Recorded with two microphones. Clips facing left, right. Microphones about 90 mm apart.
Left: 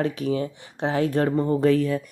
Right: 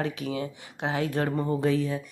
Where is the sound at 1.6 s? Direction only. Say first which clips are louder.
Left 6 dB; 55° left (ahead or behind).